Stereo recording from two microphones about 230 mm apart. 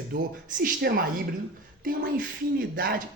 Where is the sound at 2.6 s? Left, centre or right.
Right.